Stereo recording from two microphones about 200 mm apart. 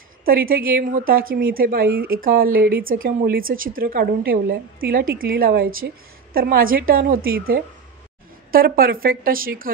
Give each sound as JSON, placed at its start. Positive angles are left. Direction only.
{"t": 0.2, "sound": "a woman's voice", "side_deg": -45}